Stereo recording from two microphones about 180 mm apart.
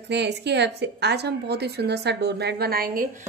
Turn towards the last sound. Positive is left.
turn(degrees=-55)  # may be behind; listen again after turning